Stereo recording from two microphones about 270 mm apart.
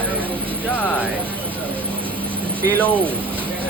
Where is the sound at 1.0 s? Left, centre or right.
Centre.